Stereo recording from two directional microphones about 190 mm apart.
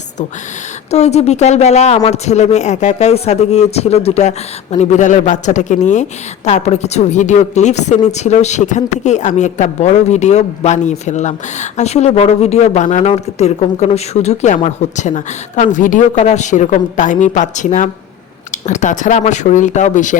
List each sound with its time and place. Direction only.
0.9 s a man's voice: 35° left (ahead or behind)